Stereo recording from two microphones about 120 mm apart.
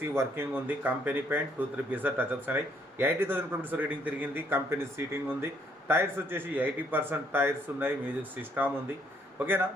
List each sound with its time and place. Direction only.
0.0 s a man's voice: 20° right (ahead or behind)